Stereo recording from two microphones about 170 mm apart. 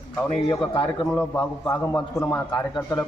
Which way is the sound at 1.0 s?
5° left (ahead or behind).